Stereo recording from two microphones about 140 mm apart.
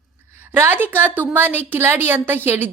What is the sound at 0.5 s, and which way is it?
A woman's voice, 15° right (ahead or behind).